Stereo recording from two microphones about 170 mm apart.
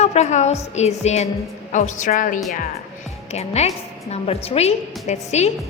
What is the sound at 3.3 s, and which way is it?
A woman's voice, 40° left (ahead or behind).